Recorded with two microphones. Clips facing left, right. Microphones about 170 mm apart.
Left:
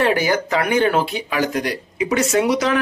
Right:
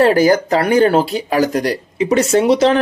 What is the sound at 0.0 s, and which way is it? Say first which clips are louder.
Speech: right 7 dB; 40° right (ahead or behind).